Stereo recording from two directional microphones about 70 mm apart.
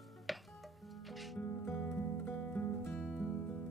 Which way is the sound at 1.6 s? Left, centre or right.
Left.